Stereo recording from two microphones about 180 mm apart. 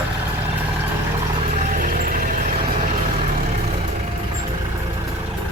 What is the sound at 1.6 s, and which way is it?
Vehicle, 50° right (ahead or behind).